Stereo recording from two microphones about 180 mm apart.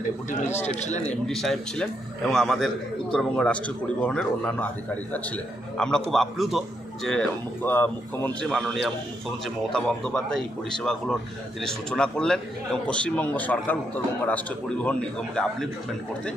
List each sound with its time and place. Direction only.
0.7 s a man's voice: 40° left (ahead or behind)
1.2 s a man's voice: centre (ahead or behind)
5.8 s a man's voice: 5° left (ahead or behind)
9.7 s a man's voice: 5° left (ahead or behind)